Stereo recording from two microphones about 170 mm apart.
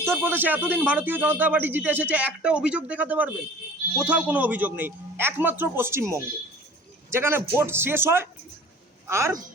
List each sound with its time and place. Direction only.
0.0 s a man's voice: 15° right (ahead or behind)